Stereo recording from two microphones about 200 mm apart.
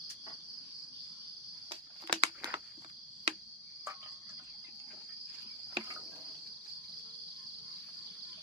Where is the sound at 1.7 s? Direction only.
25° right (ahead or behind).